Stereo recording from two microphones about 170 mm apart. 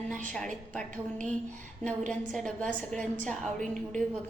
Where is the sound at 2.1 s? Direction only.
5° left (ahead or behind).